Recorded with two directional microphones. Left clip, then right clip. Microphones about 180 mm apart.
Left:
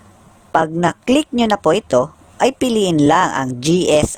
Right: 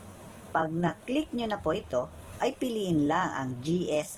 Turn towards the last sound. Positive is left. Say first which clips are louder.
# left 16 dB
turn(degrees=45)  # may be behind; listen again after turning